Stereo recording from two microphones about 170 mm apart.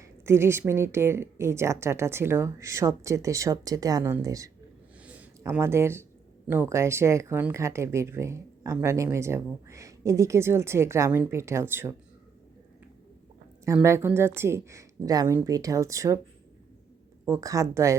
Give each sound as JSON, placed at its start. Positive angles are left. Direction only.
{"t": 0.0, "sound": "speech", "side_deg": -15}
{"t": 5.0, "sound": "a sound", "side_deg": -10}
{"t": 6.5, "sound": "speech", "side_deg": -15}
{"t": 13.7, "sound": "speech", "side_deg": -15}
{"t": 17.2, "sound": "speech", "side_deg": -20}